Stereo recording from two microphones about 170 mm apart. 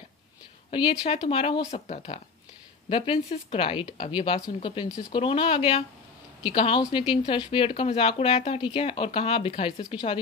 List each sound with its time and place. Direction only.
0.7 s speech: 30° left (ahead or behind)